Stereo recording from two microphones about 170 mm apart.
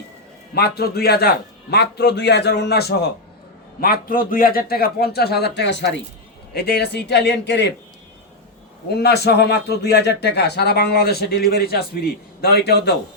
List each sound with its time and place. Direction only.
0.5 s a man's voice: 70° left (ahead or behind)
3.8 s a man's voice: 60° left (ahead or behind); by 6.0 s 90° left
6.5 s a man's voice: 70° left (ahead or behind); by 7.7 s 90° left
8.9 s a man's voice: 75° left (ahead or behind)